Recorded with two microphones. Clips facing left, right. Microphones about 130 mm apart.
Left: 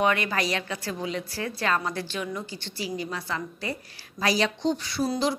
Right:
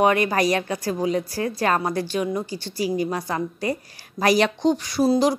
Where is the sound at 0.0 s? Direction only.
40° right (ahead or behind).